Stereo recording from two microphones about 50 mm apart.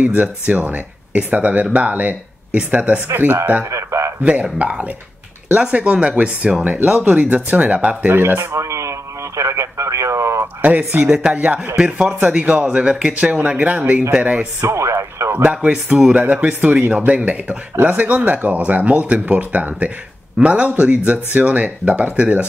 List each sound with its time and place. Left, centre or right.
0.0 s speech: right
3.7 s a sound: right
4.2 s speech: right
8.1 s speech: right
8.5 s a sound: right
9.4 s radio: right
10.6 s speech: right
11.1 s speech: right
11.3 s speech: right
11.7 s speech: centre
14.6 s speech: right
15.7 s speech: centre